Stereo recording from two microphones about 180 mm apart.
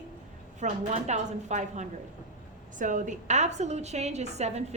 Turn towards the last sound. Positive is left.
turn(degrees=-40)  # may be behind; listen again after turning